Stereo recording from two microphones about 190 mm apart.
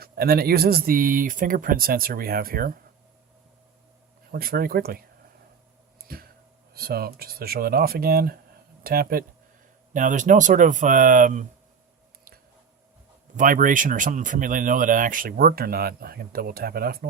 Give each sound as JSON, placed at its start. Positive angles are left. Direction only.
{"t": 0.0, "sound": "speech", "side_deg": -55}
{"t": 4.3, "sound": "speech", "side_deg": -50}
{"t": 6.1, "sound": "speech", "side_deg": -50}
{"t": 13.3, "sound": "speech", "side_deg": -45}